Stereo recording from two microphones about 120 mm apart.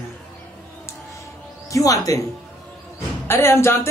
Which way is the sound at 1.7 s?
30° left (ahead or behind).